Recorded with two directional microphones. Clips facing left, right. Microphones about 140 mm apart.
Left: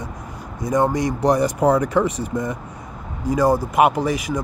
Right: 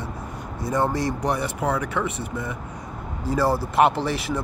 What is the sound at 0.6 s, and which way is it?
Speech, 15° left (ahead or behind).